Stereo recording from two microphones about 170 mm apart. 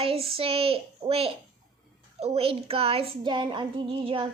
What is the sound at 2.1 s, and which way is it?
Child singing, 35° right (ahead or behind).